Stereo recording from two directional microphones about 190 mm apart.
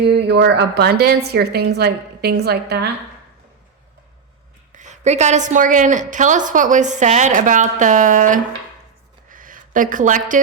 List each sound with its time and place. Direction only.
0.0 s a woman's voice: 65° right (ahead or behind)
4.7 s a woman's voice: 40° right (ahead or behind)
9.3 s a sound: 45° right (ahead or behind)